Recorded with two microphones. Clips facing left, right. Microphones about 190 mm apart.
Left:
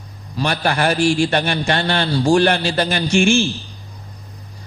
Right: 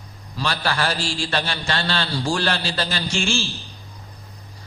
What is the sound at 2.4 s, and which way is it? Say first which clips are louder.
A man's voice: left 8 dB; 20° left (ahead or behind).